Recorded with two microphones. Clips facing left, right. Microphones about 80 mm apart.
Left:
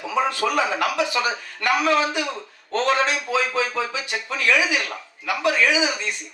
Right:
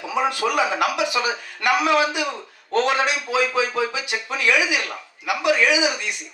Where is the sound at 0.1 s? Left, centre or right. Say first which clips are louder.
Even; centre.